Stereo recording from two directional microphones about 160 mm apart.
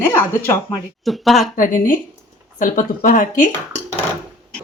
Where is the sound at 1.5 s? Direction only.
55° left (ahead or behind).